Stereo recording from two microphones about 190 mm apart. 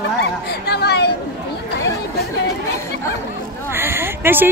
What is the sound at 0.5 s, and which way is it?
Speech, 55° left (ahead or behind).